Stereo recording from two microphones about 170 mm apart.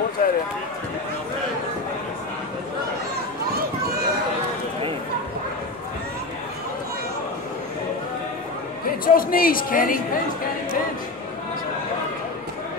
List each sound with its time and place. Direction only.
0.2 s run: 55° left (ahead or behind)
9.0 s speech: 55° left (ahead or behind)